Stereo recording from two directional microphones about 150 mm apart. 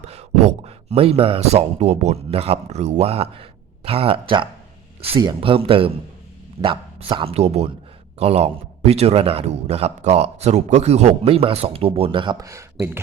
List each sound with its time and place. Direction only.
0.0 s a man's voice: 45° right (ahead or behind); by 12.6 s 20° right (ahead or behind)